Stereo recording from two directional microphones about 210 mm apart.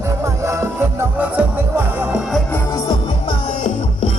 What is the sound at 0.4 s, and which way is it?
Music, 10° right (ahead or behind).